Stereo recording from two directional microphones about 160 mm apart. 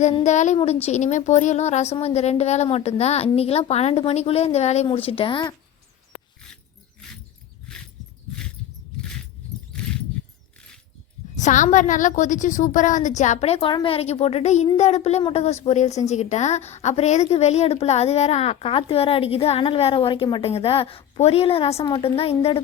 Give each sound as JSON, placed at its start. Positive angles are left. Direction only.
{"t": 0.1, "sound": "a woman's voice", "side_deg": 40}
{"t": 11.3, "sound": "a woman's voice", "side_deg": 50}
{"t": 21.8, "sound": "a woman's voice", "side_deg": 25}
{"t": 22.0, "sound": "a woman's voice", "side_deg": 40}